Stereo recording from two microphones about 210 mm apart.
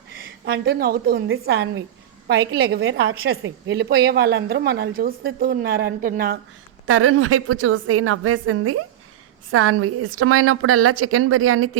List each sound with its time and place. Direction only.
0.2 s a woman's voice: 45° right (ahead or behind)
2.8 s a woman's voice: 60° right (ahead or behind); by 6.4 s 45° right (ahead or behind)
6.8 s a woman's voice: 80° right